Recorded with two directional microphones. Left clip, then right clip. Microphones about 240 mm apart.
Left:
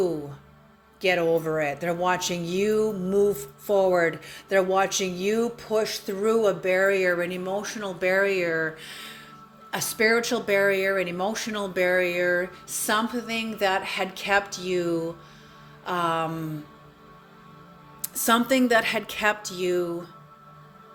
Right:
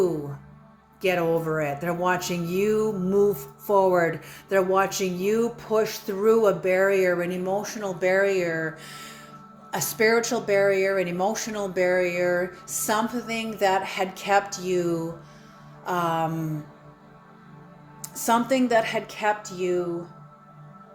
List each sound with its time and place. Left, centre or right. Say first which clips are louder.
1.0 s speech: left 1 dB; centre
18.0 s a woman's voice: even; left